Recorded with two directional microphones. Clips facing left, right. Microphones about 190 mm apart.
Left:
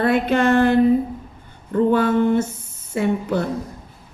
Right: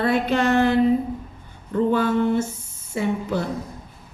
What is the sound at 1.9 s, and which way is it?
A woman's voice, 55° left (ahead or behind).